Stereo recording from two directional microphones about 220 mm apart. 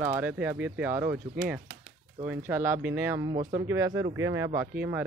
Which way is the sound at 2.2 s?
10° right (ahead or behind).